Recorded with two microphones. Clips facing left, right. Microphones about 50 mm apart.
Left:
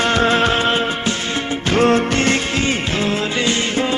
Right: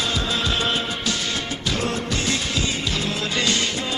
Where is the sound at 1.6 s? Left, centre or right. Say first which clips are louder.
Left 12 dB; left.